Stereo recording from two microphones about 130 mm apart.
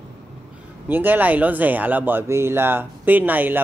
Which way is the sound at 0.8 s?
15° right (ahead or behind).